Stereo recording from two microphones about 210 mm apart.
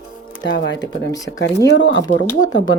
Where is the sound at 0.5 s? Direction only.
60° left (ahead or behind).